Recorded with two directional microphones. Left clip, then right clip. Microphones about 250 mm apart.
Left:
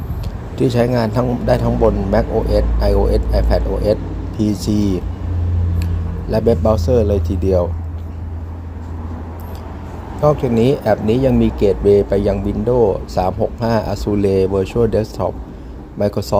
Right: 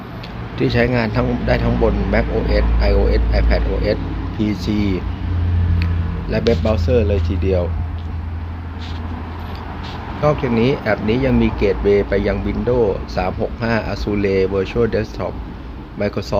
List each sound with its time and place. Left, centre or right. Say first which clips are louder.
0.6 s speech: left 1 dB; centre
6.3 s speech: left 3 dB; centre
10.2 s speech: left 2 dB; centre